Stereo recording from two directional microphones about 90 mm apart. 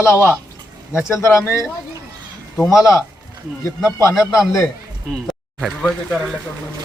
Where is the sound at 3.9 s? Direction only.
35° left (ahead or behind).